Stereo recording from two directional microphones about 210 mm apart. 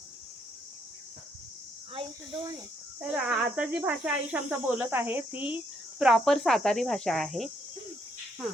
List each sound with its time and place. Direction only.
1.9 s speech: 25° right (ahead or behind)
3.0 s speech: 5° right (ahead or behind)